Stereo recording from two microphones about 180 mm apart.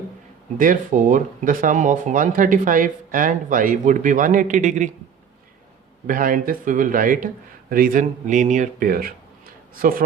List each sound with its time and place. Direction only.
0.6 s speech: 45° right (ahead or behind)
6.1 s speech: 50° right (ahead or behind)